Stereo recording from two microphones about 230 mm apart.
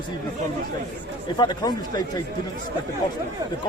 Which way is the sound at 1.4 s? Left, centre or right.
Centre.